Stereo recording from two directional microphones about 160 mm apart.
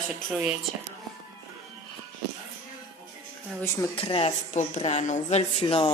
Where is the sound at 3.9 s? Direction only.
35° left (ahead or behind).